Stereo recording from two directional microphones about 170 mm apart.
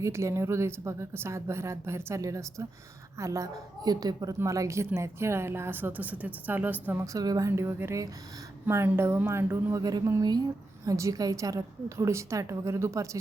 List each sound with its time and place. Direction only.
0.0 s a woman's voice: 15° right (ahead or behind)